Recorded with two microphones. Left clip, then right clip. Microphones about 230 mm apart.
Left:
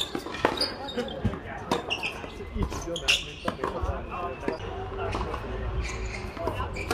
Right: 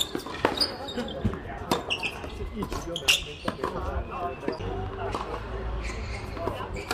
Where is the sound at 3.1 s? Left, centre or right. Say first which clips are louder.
Right 1 dB; right.